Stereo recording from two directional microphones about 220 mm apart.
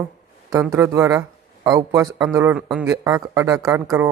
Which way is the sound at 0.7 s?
15° right (ahead or behind).